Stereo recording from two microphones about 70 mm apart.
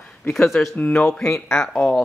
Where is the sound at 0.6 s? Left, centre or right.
Centre.